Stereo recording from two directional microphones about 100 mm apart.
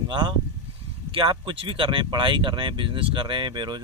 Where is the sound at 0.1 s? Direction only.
50° right (ahead or behind).